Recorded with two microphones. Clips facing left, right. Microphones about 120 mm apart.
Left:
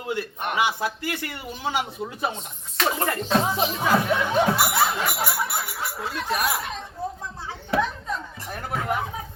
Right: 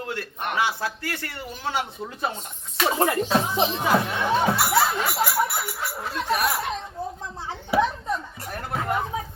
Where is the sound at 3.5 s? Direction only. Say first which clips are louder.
Right 2 dB; 25° right (ahead or behind).